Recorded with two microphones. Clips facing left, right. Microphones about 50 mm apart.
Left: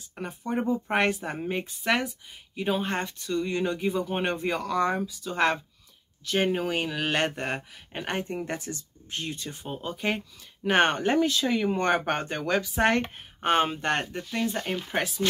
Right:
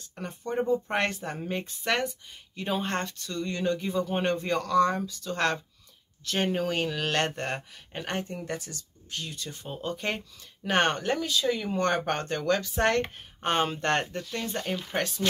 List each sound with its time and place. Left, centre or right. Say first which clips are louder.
0.3 s speech: right 1 dB; centre
8.4 s speech: left 3 dB; left
9.6 s speech: right 2 dB; centre
11.1 s speech: left 3 dB; left
11.7 s speech: left 2 dB; centre